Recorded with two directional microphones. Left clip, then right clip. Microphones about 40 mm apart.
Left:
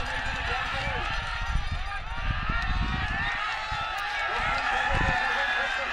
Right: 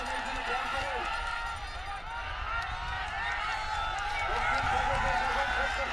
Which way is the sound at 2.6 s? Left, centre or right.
Centre.